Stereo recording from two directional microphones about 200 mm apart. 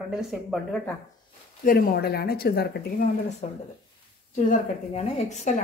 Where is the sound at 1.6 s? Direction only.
50° left (ahead or behind).